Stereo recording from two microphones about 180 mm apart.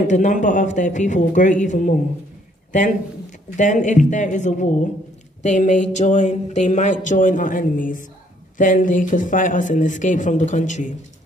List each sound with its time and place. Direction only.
0.0 s speech: 45° left (ahead or behind)
3.5 s speech: 45° left (ahead or behind)